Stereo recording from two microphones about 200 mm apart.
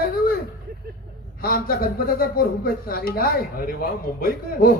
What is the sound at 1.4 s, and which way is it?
Speech, 45° left (ahead or behind).